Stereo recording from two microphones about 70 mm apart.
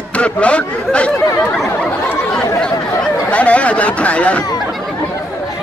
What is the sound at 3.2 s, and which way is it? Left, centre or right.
Speech, centre.